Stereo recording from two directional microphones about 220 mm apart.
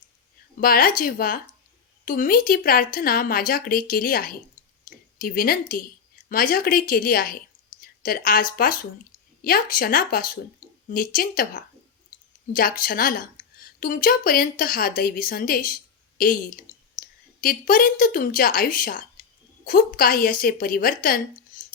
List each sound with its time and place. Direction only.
0.6 s speech: 40° left (ahead or behind)
7.8 s a sound: 40° left (ahead or behind)
8.5 s speech: 40° left (ahead or behind)